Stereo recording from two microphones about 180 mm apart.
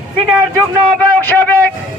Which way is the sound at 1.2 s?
10° left (ahead or behind).